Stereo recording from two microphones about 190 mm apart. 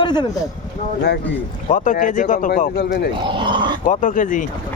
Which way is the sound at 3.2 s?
25° right (ahead or behind).